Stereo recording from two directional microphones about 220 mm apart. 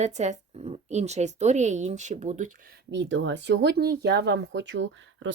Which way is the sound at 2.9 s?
55° right (ahead or behind).